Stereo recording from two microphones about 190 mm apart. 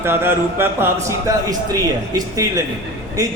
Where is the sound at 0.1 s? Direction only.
10° right (ahead or behind).